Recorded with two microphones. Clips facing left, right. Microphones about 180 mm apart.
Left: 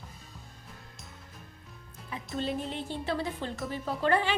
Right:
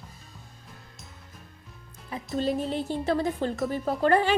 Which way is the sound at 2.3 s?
40° right (ahead or behind).